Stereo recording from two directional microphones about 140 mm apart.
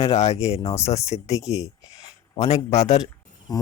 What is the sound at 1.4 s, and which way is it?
Speech, 25° left (ahead or behind).